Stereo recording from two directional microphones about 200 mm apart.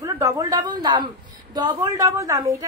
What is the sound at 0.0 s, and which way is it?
A woman's voice, 15° right (ahead or behind).